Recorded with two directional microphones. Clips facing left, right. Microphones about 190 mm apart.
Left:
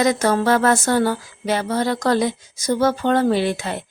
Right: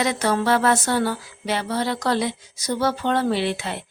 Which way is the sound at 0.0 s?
45° left (ahead or behind).